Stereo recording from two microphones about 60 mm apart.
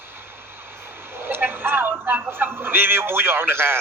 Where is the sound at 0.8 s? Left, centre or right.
Right.